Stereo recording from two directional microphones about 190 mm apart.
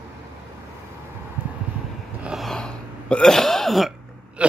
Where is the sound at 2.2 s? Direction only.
Centre (ahead or behind).